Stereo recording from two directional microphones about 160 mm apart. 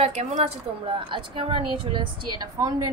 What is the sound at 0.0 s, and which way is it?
Speech, 40° right (ahead or behind).